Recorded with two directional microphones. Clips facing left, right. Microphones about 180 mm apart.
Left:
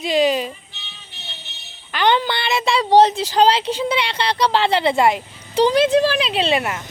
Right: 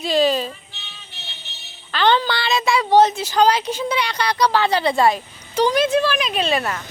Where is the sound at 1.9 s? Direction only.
15° left (ahead or behind).